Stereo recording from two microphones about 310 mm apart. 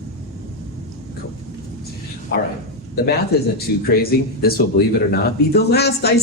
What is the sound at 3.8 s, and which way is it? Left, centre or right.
Speech, left.